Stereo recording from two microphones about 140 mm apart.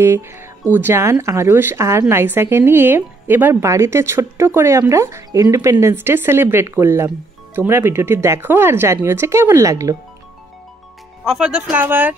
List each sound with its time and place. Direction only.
0.0 s speech: 20° right (ahead or behind)
11.2 s speech: 5° right (ahead or behind)